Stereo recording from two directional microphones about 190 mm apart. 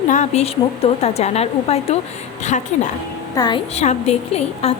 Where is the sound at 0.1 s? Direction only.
35° left (ahead or behind).